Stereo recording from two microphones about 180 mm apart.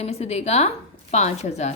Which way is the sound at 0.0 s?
35° left (ahead or behind).